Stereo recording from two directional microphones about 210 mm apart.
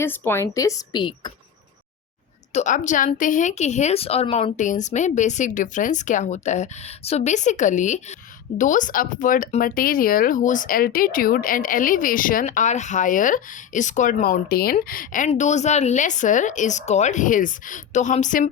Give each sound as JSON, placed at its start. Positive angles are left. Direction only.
{"t": 0.0, "sound": "a woman's voice", "side_deg": 10}
{"t": 2.5, "sound": "speech", "side_deg": 35}